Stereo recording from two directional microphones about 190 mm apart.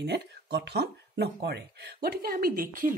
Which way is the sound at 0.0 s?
60° right (ahead or behind).